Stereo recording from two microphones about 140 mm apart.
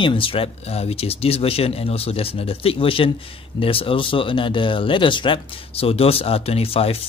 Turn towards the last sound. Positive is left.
turn(degrees=45)  # may be behind; listen again after turning